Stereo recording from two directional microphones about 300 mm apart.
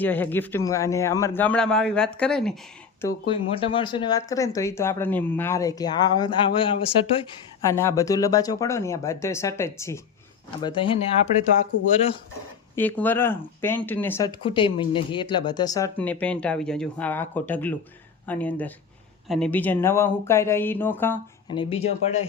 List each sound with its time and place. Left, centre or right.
0.0 s speech: centre
3.0 s speech: centre
12.7 s speech: centre